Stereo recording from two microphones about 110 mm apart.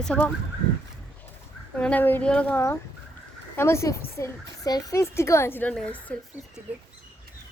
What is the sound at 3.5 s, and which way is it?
A woman's voice, 25° left (ahead or behind).